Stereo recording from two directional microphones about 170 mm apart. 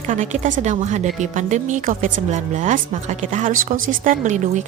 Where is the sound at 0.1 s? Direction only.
45° right (ahead or behind).